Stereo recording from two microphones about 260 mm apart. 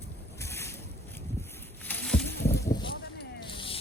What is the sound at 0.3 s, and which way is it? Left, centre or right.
Boat, centre.